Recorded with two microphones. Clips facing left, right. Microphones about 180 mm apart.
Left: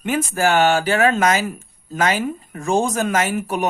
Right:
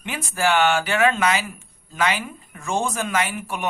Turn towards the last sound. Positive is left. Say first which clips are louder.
# left 5 dB
turn(degrees=40)  # may be behind; listen again after turning